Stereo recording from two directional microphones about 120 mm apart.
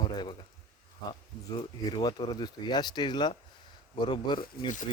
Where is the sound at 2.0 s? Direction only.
35° left (ahead or behind).